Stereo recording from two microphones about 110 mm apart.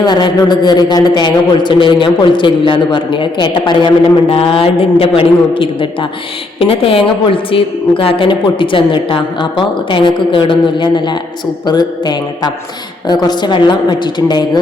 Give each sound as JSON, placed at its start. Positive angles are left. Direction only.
{"t": 0.0, "sound": "a woman's voice", "side_deg": 40}